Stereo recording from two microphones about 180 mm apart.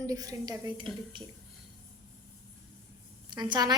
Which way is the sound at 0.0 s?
20° right (ahead or behind).